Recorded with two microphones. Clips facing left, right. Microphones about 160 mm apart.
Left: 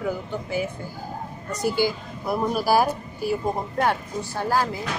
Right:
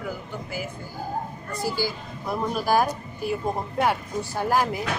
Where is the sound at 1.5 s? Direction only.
20° left (ahead or behind).